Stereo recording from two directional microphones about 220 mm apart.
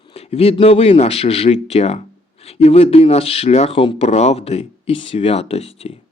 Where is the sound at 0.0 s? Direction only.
25° left (ahead or behind).